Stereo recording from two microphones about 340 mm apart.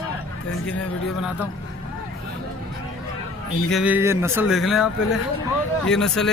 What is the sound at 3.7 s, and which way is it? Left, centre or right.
Speech, centre.